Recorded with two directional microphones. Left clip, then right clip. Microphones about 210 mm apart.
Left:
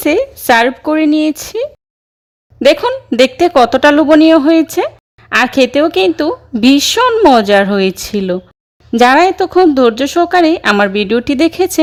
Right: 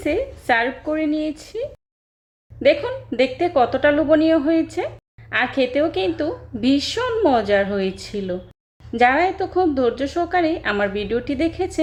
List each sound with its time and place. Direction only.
0.0 s a woman's voice: 50° left (ahead or behind)